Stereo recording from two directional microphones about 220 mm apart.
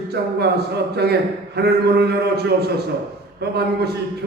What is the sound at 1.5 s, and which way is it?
A man's voice, 45° right (ahead or behind).